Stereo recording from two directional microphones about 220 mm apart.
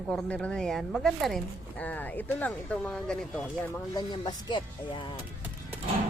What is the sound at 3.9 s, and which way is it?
Speech, 20° left (ahead or behind).